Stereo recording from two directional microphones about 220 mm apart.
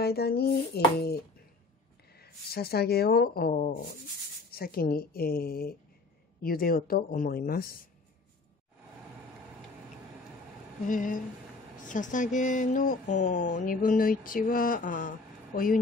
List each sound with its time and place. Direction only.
0.0 s speech: 45° left (ahead or behind)
10.9 s speech: 35° left (ahead or behind)